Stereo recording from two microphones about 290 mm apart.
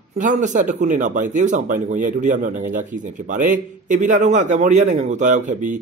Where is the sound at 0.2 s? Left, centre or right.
Right.